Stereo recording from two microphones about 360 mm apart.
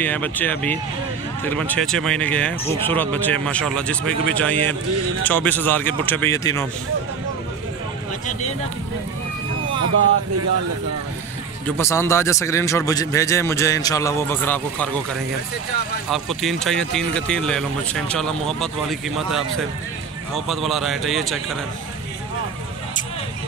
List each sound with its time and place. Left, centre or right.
0.0 s speech: centre
9.8 s speech: right
11.6 s speech: centre
16.1 s speech: centre